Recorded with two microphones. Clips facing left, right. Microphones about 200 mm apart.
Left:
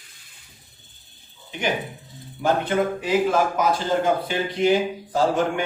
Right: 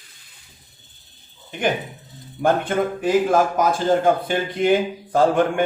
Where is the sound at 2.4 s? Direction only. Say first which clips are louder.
Right 2 dB; 50° right (ahead or behind).